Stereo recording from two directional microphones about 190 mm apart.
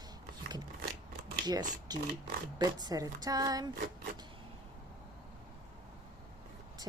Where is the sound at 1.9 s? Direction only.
20° right (ahead or behind).